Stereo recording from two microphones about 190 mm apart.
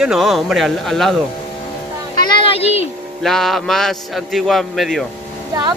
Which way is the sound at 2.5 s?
30° left (ahead or behind).